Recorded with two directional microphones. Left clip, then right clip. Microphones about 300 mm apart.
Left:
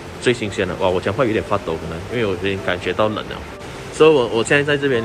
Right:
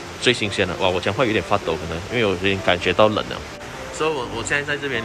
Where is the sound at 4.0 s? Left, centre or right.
Centre.